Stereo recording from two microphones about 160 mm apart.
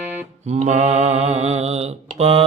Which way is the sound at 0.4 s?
45° right (ahead or behind).